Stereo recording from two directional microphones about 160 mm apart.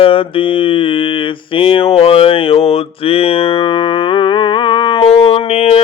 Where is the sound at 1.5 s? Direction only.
35° left (ahead or behind).